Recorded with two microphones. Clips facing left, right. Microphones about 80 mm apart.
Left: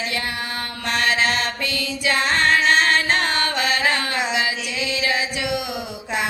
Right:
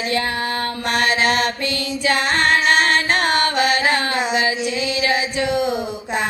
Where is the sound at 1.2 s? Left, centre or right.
Right.